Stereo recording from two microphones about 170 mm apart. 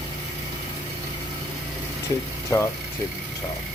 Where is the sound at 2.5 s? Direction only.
20° left (ahead or behind).